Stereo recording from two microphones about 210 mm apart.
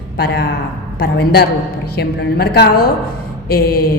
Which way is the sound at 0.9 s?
50° left (ahead or behind).